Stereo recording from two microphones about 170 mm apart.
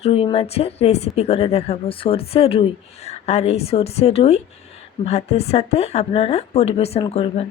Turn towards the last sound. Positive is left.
turn(degrees=35)  # may be behind; listen again after turning